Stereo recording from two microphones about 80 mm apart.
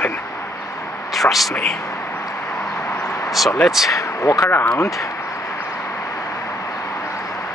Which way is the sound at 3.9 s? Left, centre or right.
Left.